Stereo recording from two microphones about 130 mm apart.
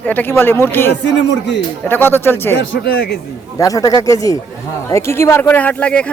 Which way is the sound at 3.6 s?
25° left (ahead or behind).